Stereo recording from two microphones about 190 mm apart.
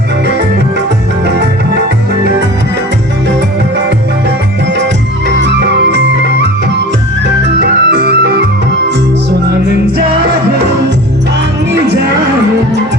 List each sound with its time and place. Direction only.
5.3 s music: 65° right (ahead or behind)
7.4 s organ: 55° right (ahead or behind)